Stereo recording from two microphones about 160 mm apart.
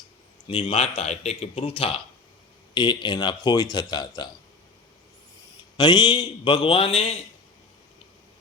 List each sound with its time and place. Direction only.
0.6 s speech: 40° left (ahead or behind)
5.7 s speech: 25° left (ahead or behind)